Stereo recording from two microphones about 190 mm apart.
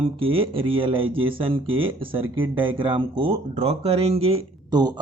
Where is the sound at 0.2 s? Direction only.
30° right (ahead or behind).